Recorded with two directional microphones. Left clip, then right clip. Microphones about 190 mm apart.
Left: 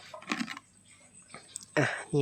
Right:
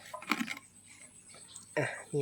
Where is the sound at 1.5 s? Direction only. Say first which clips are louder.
Left 5 dB; 30° left (ahead or behind).